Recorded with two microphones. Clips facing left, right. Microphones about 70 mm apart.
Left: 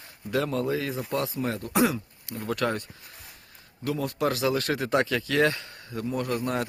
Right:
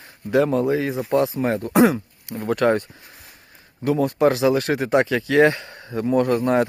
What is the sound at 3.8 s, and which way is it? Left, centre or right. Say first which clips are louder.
Speech: right 9 dB; right.